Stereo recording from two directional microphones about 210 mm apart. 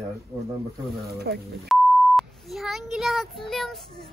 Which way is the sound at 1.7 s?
Centre (ahead or behind).